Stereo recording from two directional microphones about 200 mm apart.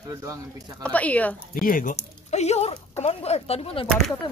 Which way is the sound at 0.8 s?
5° left (ahead or behind).